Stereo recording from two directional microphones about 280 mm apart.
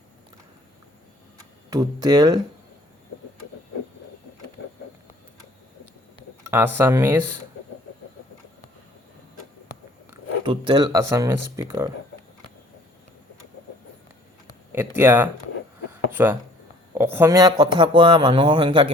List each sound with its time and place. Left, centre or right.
1.7 s speech: centre
6.4 s a sound: centre
6.7 s speech: centre
10.4 s speech: centre
14.7 s speech: centre
15.9 s a sound: centre
16.9 s speech: centre